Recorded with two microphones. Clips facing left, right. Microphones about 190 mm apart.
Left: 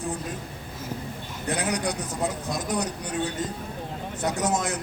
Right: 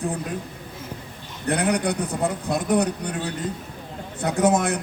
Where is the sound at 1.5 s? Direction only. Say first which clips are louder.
Right 5 dB; 60° right (ahead or behind).